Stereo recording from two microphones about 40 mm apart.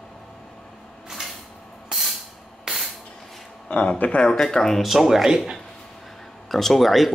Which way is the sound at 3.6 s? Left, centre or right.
Left.